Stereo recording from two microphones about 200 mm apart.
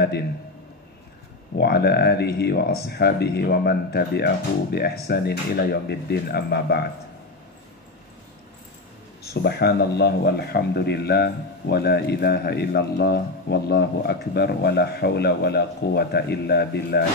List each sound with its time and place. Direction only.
1.6 s a man's voice: 55° left (ahead or behind)
9.2 s a man's voice: 55° left (ahead or behind)